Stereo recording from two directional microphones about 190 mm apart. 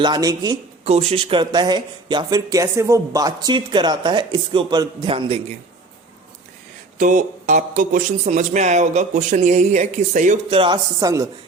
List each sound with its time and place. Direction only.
0.0 s speech: 20° right (ahead or behind)
0.9 s speech: 35° right (ahead or behind)
7.0 s speech: 40° right (ahead or behind)
10.5 s speech: 25° right (ahead or behind)